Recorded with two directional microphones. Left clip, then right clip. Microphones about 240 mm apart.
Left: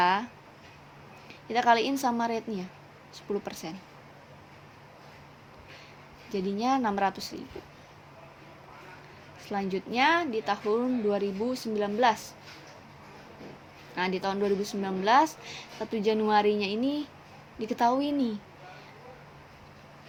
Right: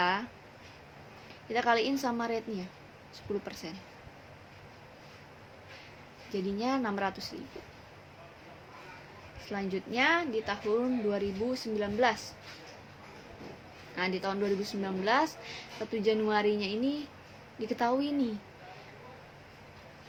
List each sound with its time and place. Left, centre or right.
0.0 s a sound: left
1.5 s speech: left
6.3 s speech: left
9.5 s speech: left
13.9 s speech: left